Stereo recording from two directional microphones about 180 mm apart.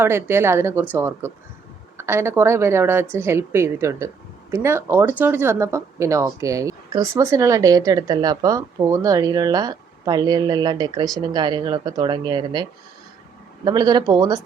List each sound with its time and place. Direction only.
0.0 s speech: 15° right (ahead or behind)
13.7 s speech: 20° right (ahead or behind)